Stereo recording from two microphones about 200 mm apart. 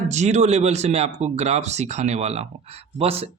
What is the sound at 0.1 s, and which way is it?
Speech, 35° right (ahead or behind).